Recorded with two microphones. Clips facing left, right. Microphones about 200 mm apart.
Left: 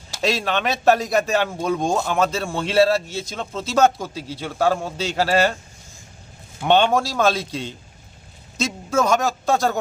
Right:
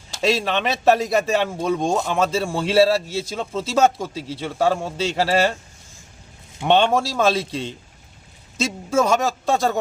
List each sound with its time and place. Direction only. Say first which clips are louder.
0.1 s a man's voice: right 2 dB; centre (ahead or behind)
6.7 s a man's voice: even; centre (ahead or behind)